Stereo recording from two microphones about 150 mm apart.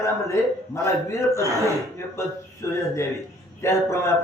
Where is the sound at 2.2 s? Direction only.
20° left (ahead or behind).